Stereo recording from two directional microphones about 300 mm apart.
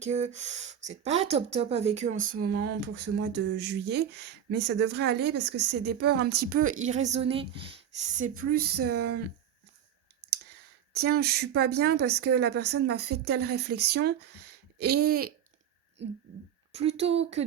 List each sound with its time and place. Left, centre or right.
0.0 s a woman's voice: right
10.9 s speech: right
16.7 s a woman's voice: right